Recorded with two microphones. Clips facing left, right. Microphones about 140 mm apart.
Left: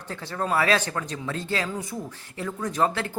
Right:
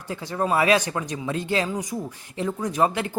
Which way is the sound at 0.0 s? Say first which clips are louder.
Right 4 dB; 10° right (ahead or behind).